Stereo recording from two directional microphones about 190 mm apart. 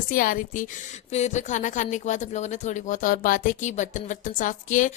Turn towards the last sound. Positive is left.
turn(degrees=45)  # may be behind; listen again after turning